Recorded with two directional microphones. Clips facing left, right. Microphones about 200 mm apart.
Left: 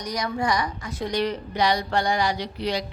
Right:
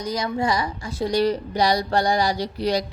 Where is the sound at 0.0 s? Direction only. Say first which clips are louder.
Right 3 dB; 25° right (ahead or behind).